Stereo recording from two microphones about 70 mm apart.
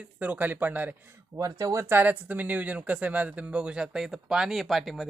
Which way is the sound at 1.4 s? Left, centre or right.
Right.